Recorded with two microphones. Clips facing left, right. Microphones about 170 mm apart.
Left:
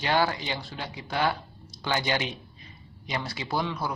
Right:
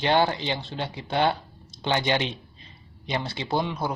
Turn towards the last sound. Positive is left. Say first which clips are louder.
# right 3 dB
turn(degrees=-20)  # may be behind; listen again after turning